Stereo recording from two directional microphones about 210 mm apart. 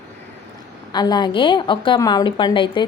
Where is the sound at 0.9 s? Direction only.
20° left (ahead or behind).